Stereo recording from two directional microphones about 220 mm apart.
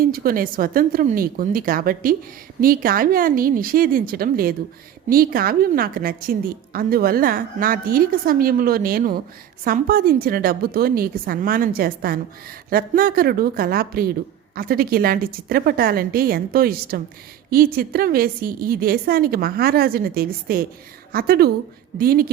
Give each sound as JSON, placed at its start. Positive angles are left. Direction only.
{"t": 0.0, "sound": "a woman's voice", "side_deg": -40}